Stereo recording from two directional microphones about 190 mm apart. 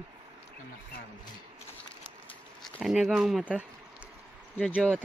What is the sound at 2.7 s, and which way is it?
Speech, centre (ahead or behind).